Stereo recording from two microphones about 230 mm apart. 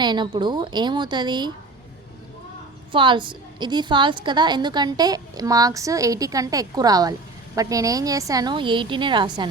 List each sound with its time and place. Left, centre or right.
0.0 s speech: centre
2.9 s a woman's voice: right